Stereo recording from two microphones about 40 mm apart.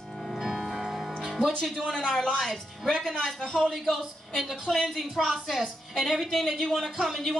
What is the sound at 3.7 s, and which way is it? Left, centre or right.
A woman's voice, centre.